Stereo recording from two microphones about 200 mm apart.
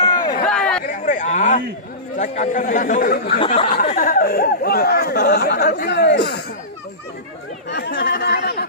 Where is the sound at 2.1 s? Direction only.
40° left (ahead or behind).